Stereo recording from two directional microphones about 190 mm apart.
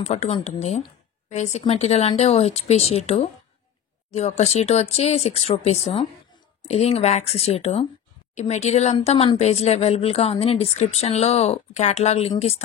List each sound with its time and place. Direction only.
0.0 s speech: 35° left (ahead or behind)